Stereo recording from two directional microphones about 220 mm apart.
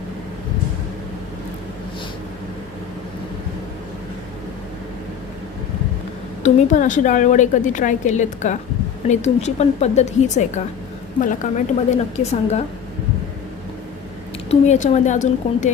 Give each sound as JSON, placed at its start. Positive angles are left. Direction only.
{"t": 6.4, "sound": "a woman's voice", "side_deg": 35}
{"t": 14.5, "sound": "a woman's voice", "side_deg": 30}